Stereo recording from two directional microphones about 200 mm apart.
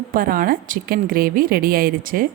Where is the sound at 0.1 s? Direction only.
45° right (ahead or behind).